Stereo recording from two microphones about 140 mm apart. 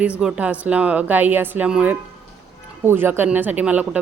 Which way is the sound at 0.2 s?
5° right (ahead or behind).